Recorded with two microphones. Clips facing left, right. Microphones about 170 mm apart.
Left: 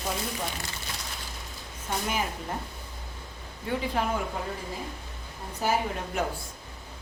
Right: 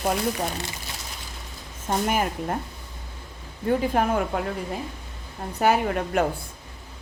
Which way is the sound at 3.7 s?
55° right (ahead or behind).